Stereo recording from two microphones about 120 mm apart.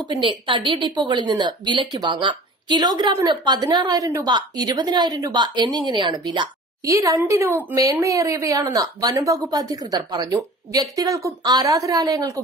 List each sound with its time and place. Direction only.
0.1 s a woman's voice: 45° right (ahead or behind)